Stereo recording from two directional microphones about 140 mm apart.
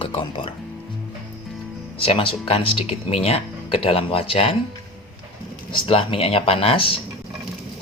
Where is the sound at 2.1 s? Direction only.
40° left (ahead or behind).